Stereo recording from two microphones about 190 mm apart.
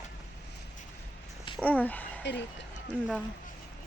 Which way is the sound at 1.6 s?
10° left (ahead or behind).